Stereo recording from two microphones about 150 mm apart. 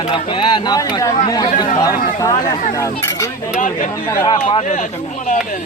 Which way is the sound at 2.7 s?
20° left (ahead or behind).